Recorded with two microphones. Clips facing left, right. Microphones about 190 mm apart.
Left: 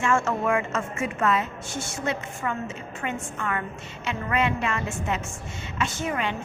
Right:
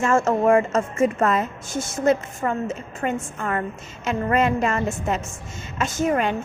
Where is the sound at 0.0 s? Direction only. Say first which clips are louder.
Right 5 dB; 40° right (ahead or behind).